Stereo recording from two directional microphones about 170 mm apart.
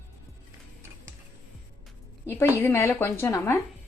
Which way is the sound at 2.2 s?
15° left (ahead or behind).